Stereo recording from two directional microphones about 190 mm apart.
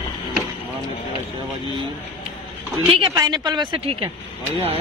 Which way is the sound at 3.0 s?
20° right (ahead or behind).